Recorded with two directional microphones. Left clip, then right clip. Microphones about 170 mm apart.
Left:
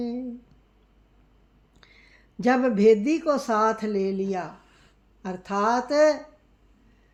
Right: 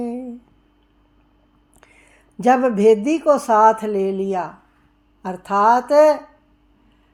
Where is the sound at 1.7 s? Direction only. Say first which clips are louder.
Right 3 dB; 45° right (ahead or behind).